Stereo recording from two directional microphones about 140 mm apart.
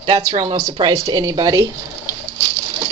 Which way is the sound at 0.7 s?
30° right (ahead or behind).